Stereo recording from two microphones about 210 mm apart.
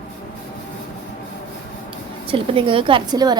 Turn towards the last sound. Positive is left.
turn(degrees=-20)  # may be behind; listen again after turning